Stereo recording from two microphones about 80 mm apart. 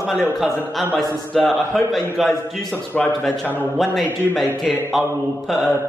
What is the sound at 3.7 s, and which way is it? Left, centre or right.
Speech, centre.